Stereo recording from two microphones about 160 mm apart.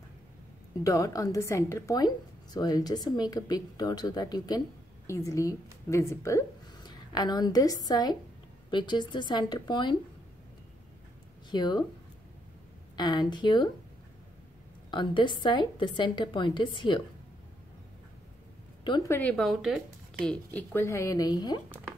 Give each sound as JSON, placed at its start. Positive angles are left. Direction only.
{"t": 0.8, "sound": "a woman's voice", "side_deg": 20}
{"t": 11.5, "sound": "a woman's voice", "side_deg": 25}
{"t": 12.9, "sound": "a woman's voice", "side_deg": 25}
{"t": 14.9, "sound": "a woman's voice", "side_deg": 30}
{"t": 19.0, "sound": "speech", "side_deg": 10}
{"t": 19.3, "sound": "speech", "side_deg": 0}